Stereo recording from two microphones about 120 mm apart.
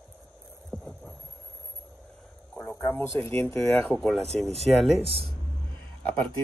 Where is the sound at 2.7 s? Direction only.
20° left (ahead or behind).